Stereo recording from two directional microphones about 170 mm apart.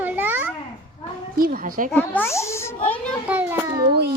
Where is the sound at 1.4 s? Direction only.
55° right (ahead or behind).